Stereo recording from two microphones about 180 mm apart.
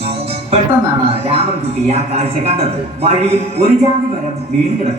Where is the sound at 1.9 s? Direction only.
35° right (ahead or behind).